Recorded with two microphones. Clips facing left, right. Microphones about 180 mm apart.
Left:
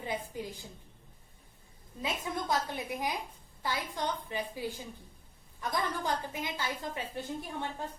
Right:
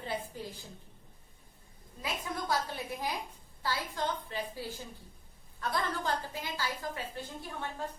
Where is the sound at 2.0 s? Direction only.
20° left (ahead or behind).